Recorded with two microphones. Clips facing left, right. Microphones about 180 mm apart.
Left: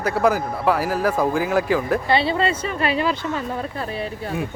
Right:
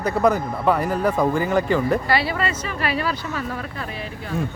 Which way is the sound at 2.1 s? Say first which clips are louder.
Left 3 dB; 25° left (ahead or behind).